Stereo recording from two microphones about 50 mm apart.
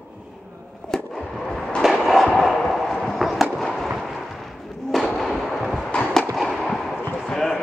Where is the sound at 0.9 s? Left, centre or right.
Centre.